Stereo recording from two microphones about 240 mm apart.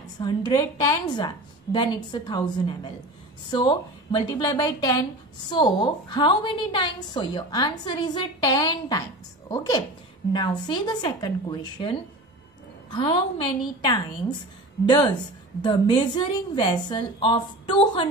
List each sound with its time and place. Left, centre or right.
0.2 s a woman's voice: centre
15.6 s a woman's voice: centre